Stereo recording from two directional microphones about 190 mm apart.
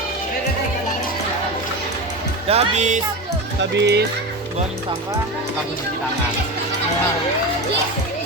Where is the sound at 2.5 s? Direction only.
35° right (ahead or behind).